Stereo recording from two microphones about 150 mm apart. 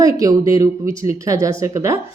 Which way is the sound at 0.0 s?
25° right (ahead or behind).